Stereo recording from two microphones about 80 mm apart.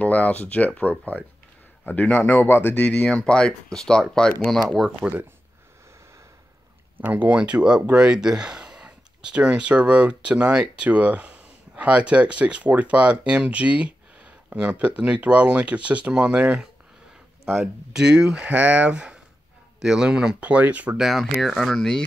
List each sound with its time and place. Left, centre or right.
0.0 s speech: centre
7.0 s speech: centre
21.0 s speech: centre